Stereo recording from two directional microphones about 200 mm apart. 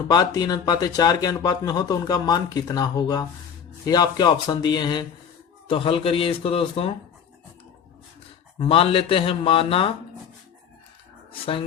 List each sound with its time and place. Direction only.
0.1 s speech: 20° left (ahead or behind)
8.5 s speech: 25° left (ahead or behind)